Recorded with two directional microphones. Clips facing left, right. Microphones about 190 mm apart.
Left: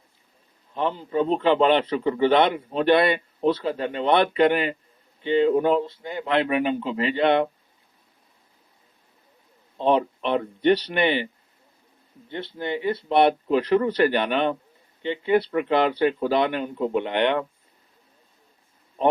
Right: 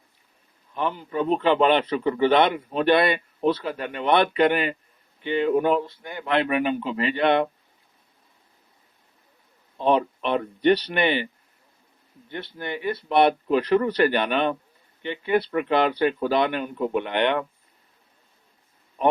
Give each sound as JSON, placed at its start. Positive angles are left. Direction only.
{"t": 0.7, "sound": "a man's voice", "side_deg": 30}
{"t": 9.7, "sound": "a man's voice", "side_deg": 25}
{"t": 12.3, "sound": "a man's voice", "side_deg": 25}
{"t": 19.0, "sound": "a sound", "side_deg": 30}